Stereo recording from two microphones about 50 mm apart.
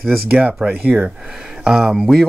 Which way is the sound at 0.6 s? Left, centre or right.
Centre.